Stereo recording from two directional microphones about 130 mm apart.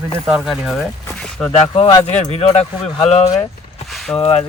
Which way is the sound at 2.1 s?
55° left (ahead or behind).